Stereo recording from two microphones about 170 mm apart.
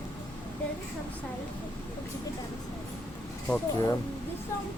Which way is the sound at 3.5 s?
15° left (ahead or behind).